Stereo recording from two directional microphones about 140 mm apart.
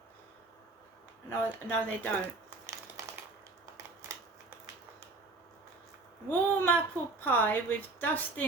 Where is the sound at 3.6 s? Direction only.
20° right (ahead or behind).